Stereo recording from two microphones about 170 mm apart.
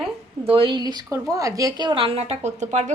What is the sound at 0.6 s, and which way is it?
Speech, 30° right (ahead or behind).